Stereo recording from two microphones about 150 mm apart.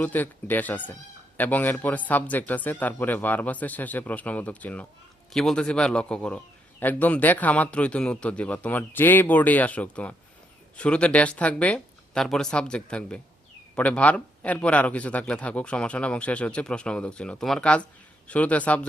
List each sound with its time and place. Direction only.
0.0 s a man's voice: 10° left (ahead or behind)